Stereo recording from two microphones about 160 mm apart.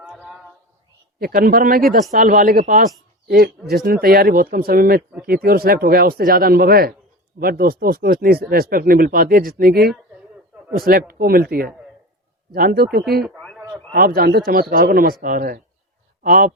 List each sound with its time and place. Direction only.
1.2 s a man's voice: 65° right (ahead or behind)
12.5 s speech: 65° right (ahead or behind)
13.9 s speech: 65° right (ahead or behind)